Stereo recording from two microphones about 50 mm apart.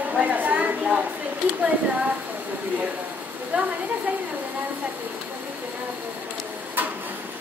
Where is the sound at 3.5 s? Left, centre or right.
Right.